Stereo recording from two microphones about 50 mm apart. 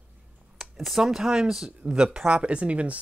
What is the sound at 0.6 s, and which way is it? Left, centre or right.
Speech, centre.